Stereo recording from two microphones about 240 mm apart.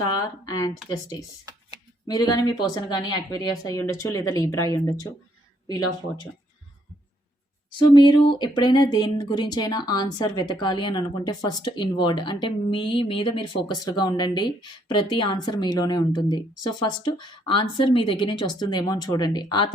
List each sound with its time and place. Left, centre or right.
0.1 s speech: centre
2.0 s speech: centre
7.8 s speech: centre